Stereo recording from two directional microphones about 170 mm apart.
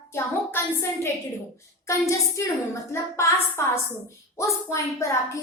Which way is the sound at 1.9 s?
15° left (ahead or behind).